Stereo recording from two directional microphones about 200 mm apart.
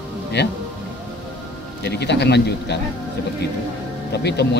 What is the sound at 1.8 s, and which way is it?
Speech, 55° left (ahead or behind).